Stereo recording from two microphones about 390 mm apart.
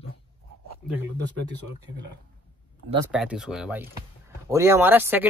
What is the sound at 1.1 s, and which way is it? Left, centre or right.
Speech, right.